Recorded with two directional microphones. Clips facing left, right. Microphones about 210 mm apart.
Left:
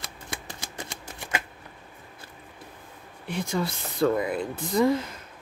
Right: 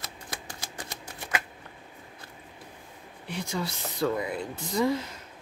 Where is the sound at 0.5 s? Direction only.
25° left (ahead or behind).